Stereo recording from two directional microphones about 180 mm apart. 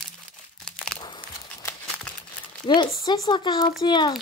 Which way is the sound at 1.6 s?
5° left (ahead or behind).